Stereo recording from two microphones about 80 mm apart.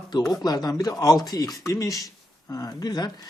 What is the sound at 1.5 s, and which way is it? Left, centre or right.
Speech, left.